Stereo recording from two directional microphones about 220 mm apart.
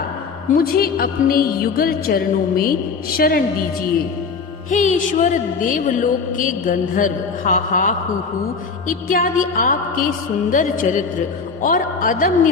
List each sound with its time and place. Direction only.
0.5 s a woman's voice: 40° left (ahead or behind)
4.7 s a woman's voice: 35° left (ahead or behind)